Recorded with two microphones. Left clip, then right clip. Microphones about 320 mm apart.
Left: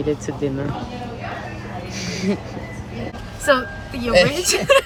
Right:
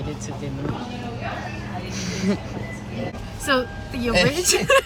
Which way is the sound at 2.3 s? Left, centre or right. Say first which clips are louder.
Left 2 dB; centre.